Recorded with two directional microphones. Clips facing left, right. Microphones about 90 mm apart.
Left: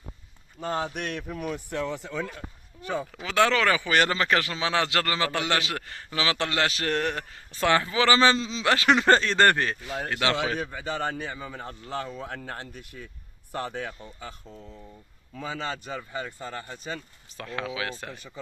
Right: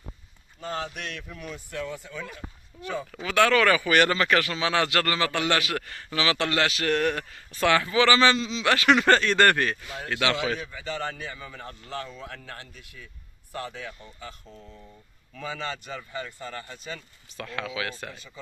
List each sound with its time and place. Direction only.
0.6 s speech: 20° left (ahead or behind)
1.2 s speech: 50° left (ahead or behind)
1.9 s speech: 80° left
2.1 s speech: 40° left (ahead or behind)
3.3 s speech: 25° left (ahead or behind)
13.7 s speech: 40° left (ahead or behind)
15.4 s speech: 35° left (ahead or behind)